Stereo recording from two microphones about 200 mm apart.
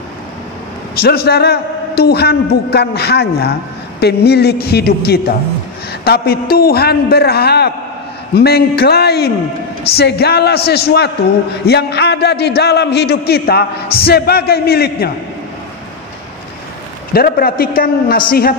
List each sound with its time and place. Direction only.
1.0 s a man's voice: 50° left (ahead or behind)
17.1 s a man's voice: 50° left (ahead or behind)